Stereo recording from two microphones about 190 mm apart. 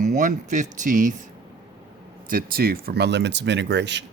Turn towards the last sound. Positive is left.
turn(degrees=-65)  # may be behind; listen again after turning